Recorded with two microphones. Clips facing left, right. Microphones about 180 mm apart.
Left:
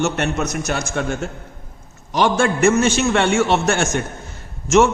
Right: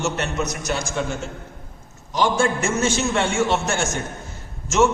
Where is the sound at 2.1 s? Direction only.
70° left (ahead or behind).